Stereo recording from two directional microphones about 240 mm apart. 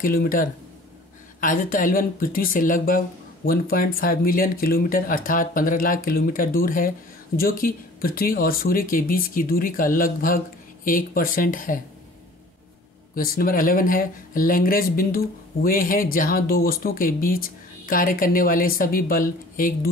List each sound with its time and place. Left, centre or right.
0.0 s speech: left
13.1 s speech: left